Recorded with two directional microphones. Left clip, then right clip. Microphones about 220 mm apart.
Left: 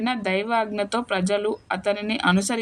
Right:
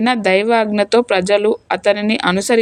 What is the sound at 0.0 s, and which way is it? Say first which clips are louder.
Speech: right 10 dB; 35° right (ahead or behind).